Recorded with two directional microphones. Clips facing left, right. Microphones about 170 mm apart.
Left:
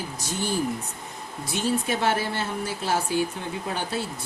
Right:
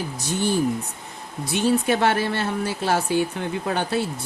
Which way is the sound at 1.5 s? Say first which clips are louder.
Right 5 dB; 65° right (ahead or behind).